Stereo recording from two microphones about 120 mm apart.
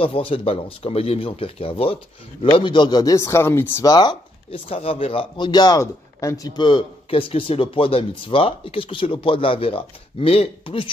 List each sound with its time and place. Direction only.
0.0 s a man's voice: 50° left (ahead or behind); by 3.8 s 20° left (ahead or behind)
3.8 s speech: 35° left (ahead or behind)
4.5 s a man's voice: 50° left (ahead or behind)